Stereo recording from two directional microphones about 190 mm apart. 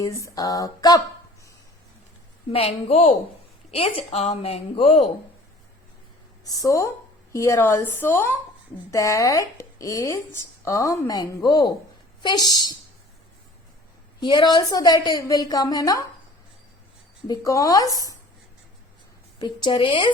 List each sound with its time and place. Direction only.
0.0 s a woman's voice: 20° left (ahead or behind)
2.5 s a woman's voice: 30° left (ahead or behind)
6.4 s a woman's voice: 20° left (ahead or behind)
14.2 s a woman's voice: 25° left (ahead or behind)
17.2 s a woman's voice: 20° left (ahead or behind)
19.4 s a woman's voice: 25° left (ahead or behind)